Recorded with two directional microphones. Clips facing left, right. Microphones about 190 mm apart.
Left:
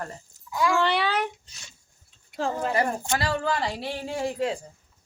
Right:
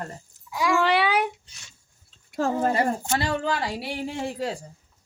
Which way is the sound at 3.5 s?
5° right (ahead or behind).